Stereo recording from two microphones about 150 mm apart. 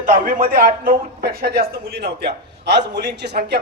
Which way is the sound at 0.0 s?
65° right (ahead or behind).